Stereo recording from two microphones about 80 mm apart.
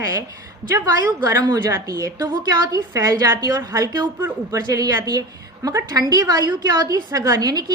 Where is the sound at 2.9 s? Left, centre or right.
Right.